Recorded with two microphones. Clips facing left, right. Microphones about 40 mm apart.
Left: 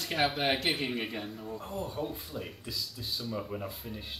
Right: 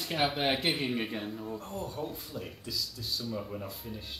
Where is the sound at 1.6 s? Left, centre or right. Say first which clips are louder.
Left 1 dB; centre.